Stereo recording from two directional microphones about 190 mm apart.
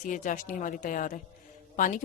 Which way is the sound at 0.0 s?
45° left (ahead or behind).